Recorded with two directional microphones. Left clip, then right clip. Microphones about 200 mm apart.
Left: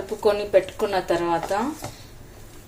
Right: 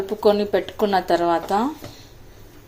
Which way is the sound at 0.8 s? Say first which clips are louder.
Right 4 dB; 25° right (ahead or behind).